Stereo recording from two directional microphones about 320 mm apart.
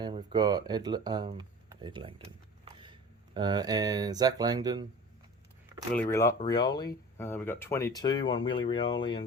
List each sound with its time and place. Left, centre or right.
0.0 s speech: centre
5.9 s speech: centre